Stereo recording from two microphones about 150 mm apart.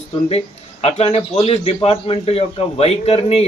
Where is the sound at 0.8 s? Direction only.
45° left (ahead or behind).